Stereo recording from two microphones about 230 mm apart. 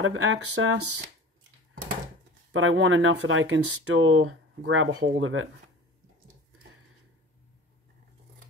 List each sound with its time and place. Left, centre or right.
0.0 s speech: right
2.5 s speech: right